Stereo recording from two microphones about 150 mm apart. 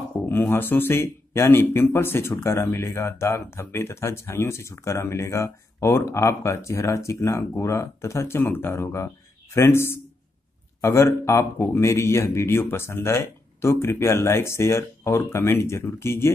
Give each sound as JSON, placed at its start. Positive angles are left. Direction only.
{"t": 0.3, "sound": "speech", "side_deg": 15}